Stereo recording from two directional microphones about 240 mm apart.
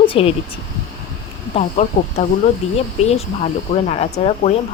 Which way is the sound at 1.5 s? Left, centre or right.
Left.